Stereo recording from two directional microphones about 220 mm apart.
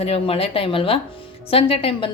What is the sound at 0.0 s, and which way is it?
A woman's voice, 25° left (ahead or behind).